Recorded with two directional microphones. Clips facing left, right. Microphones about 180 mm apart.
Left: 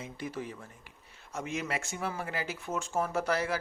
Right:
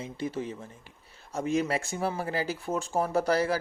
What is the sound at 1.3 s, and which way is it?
Speech, 35° right (ahead or behind).